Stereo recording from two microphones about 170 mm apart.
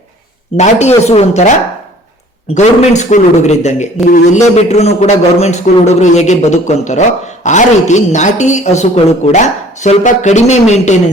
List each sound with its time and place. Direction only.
0.5 s speech: 40° left (ahead or behind)
2.6 s a man's voice: 45° left (ahead or behind)